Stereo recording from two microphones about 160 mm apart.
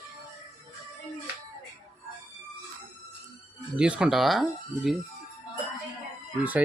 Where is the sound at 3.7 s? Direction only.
5° right (ahead or behind).